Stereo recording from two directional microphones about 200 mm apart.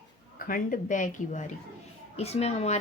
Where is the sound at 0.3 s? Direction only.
45° left (ahead or behind).